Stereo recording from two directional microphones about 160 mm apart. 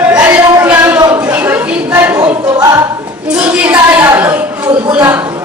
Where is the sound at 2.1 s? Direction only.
25° right (ahead or behind).